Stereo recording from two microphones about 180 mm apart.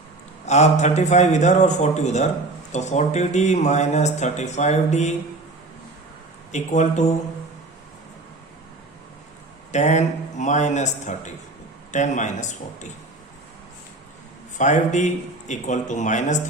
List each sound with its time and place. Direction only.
0.4 s speech: 40° left (ahead or behind)
6.5 s speech: 40° left (ahead or behind)
9.7 s speech: 40° left (ahead or behind)
14.6 s speech: 40° left (ahead or behind)